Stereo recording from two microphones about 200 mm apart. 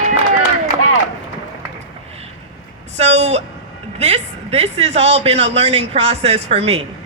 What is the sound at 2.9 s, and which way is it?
A man's voice, 35° right (ahead or behind).